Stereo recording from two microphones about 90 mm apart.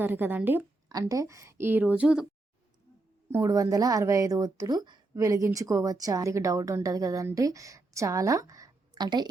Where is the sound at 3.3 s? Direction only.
40° right (ahead or behind).